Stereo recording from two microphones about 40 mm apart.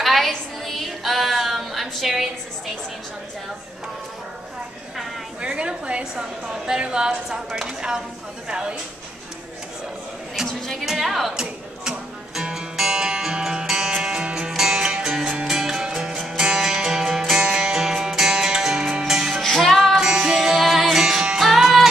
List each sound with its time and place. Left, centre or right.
0.0 s music: centre
0.7 s a capella: centre
5.4 s a woman's voice: right
10.9 s a woman's voice: centre
12.5 s music: centre
19.4 s music: centre
20.0 s music: centre
20.4 s music: centre